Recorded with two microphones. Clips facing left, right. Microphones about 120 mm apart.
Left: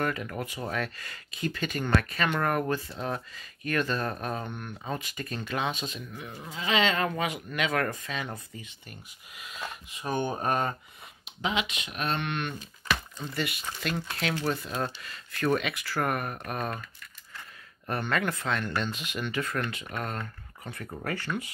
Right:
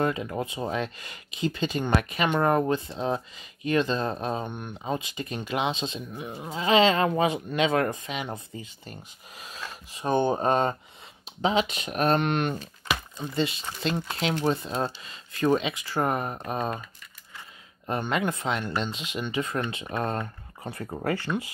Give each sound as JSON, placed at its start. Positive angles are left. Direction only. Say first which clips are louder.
{"t": 0.0, "sound": "speech", "louder": "right 4 dB", "side_deg": -20}
{"t": 8.8, "sound": "speech", "louder": "right 5 dB", "side_deg": -35}
{"t": 11.2, "sound": "speech", "louder": "right 6 dB", "side_deg": -35}
{"t": 12.9, "sound": "speech", "louder": "right 3 dB", "side_deg": -20}
{"t": 17.8, "sound": "speech", "louder": "right 2 dB", "side_deg": -20}